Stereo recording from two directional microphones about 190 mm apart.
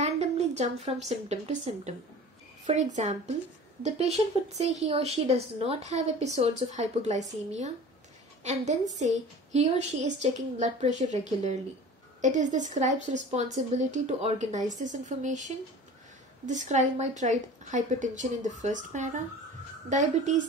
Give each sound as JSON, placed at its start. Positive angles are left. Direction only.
{"t": 0.0, "sound": "a woman's voice", "side_deg": -35}
{"t": 8.9, "sound": "a woman's voice", "side_deg": -35}